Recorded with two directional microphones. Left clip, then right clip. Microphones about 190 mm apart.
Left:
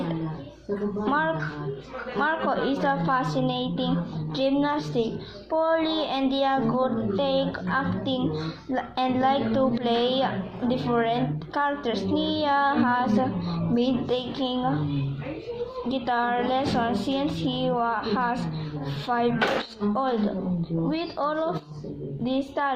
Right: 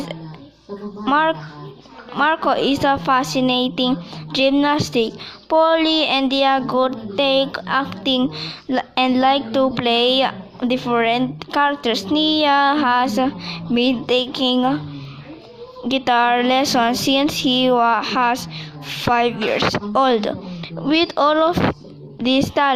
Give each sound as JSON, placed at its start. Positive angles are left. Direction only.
{"t": 1.0, "sound": "speech", "side_deg": -40}
{"t": 16.0, "sound": "speech", "side_deg": -40}